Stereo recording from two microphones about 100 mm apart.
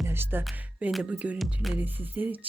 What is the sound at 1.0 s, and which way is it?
Music, 15° right (ahead or behind).